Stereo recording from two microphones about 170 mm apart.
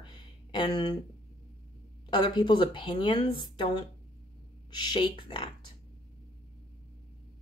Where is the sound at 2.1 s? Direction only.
30° left (ahead or behind).